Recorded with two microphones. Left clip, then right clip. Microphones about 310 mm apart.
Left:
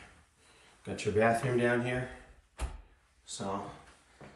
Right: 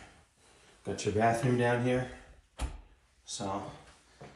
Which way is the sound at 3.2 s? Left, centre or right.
Centre.